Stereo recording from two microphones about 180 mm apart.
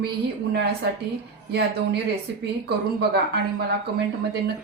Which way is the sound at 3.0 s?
65° right (ahead or behind).